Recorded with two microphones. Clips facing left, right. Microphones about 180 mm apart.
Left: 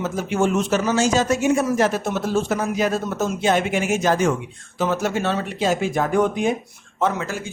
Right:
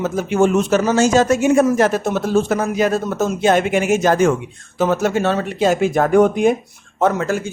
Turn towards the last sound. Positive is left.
turn(degrees=-50)  # may be behind; listen again after turning